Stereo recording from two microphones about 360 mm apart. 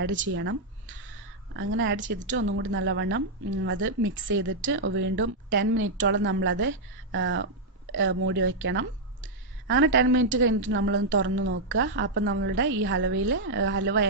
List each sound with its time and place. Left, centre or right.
0.0 s speech: right
1.6 s speech: right